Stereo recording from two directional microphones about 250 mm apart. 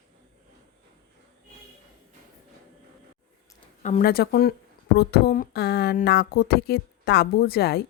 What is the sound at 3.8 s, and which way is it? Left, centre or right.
Speech, left.